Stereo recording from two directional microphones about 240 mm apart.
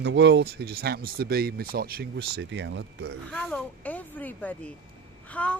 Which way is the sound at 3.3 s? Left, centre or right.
Centre.